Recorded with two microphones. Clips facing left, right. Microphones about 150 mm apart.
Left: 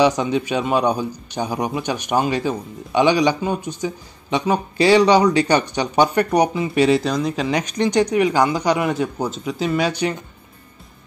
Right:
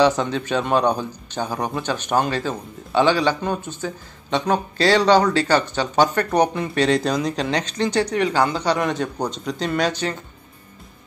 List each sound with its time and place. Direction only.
0.0 s a man's voice: 15° left (ahead or behind)